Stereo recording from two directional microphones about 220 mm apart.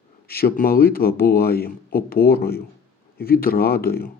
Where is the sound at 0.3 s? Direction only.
45° left (ahead or behind).